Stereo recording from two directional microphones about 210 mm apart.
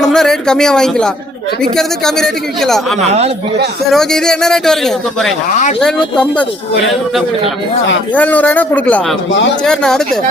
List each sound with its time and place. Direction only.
0.0 s speech: centre (ahead or behind)
3.1 s speech: 30° right (ahead or behind)
3.9 s a woman's voice: 5° left (ahead or behind)